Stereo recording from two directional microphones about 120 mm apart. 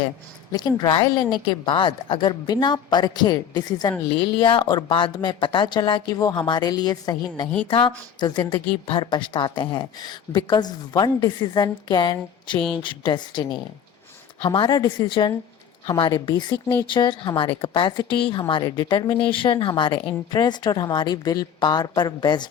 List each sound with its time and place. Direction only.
0.5 s a woman's voice: 35° left (ahead or behind)
14.8 s a woman's voice: 30° left (ahead or behind)